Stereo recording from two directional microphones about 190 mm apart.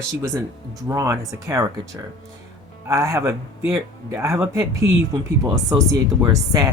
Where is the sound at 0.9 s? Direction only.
15° right (ahead or behind).